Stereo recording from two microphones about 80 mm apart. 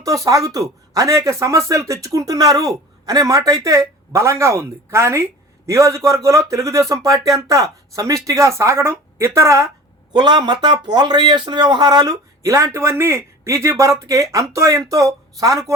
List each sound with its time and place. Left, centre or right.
0.0 s speech: right
10.1 s speech: right